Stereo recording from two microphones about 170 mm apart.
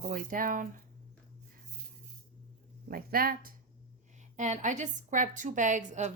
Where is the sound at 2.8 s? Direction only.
60° right (ahead or behind).